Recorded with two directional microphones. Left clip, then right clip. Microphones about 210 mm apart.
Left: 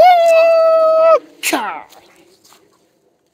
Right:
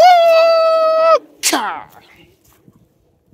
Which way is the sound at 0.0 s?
10° right (ahead or behind).